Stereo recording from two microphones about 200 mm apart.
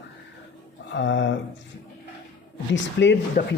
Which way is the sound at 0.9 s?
65° left (ahead or behind).